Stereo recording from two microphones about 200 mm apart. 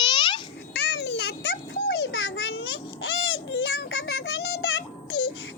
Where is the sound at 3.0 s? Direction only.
80° left; by 3.9 s 60° left (ahead or behind).